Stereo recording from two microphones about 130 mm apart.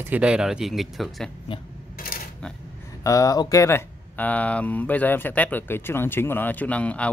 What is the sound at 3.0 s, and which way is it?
Speech, 25° left (ahead or behind).